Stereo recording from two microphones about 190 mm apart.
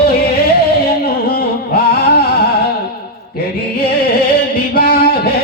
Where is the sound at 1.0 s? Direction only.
50° left (ahead or behind).